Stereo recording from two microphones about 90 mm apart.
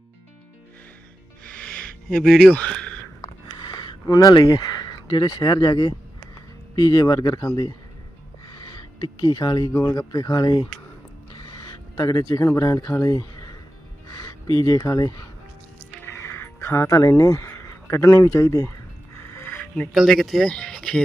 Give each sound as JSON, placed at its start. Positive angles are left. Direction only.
{"t": 1.5, "sound": "a sound", "side_deg": 15}
{"t": 3.7, "sound": "a sound", "side_deg": 60}
{"t": 4.0, "sound": "speech", "side_deg": 40}
{"t": 8.7, "sound": "speech", "side_deg": 55}
{"t": 16.0, "sound": "music", "side_deg": 25}
{"t": 17.0, "sound": "speech", "side_deg": 35}
{"t": 19.2, "sound": "music", "side_deg": 25}
{"t": 19.7, "sound": "speech", "side_deg": 10}